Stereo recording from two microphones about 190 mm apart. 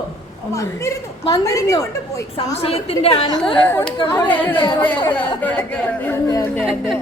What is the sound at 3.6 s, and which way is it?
Speech, 10° left (ahead or behind).